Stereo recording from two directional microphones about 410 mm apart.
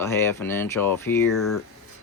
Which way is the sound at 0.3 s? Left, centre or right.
Centre.